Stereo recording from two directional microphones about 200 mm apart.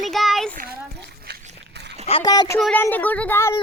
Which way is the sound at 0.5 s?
50° right (ahead or behind).